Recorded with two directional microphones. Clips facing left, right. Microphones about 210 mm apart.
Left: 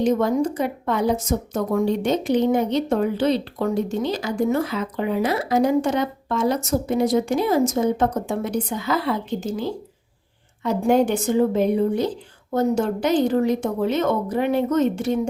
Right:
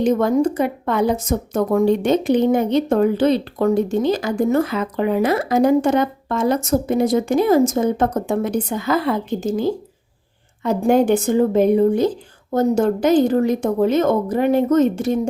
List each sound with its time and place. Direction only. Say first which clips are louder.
0.2 s a woman's voice: right 4 dB; 55° right (ahead or behind)